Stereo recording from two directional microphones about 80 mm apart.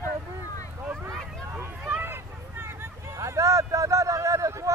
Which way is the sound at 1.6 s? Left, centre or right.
Right.